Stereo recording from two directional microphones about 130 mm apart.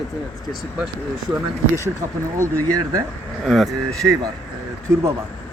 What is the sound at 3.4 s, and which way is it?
Speech, centre (ahead or behind).